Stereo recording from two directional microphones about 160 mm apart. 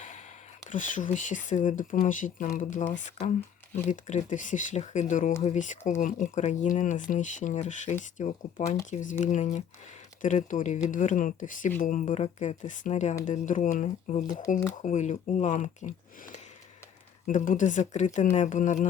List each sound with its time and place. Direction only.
0.7 s speech: 55° left (ahead or behind)